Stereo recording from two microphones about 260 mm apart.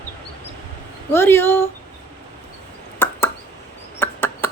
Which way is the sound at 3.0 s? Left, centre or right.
Centre.